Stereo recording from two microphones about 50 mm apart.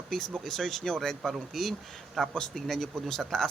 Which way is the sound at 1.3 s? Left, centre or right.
Centre.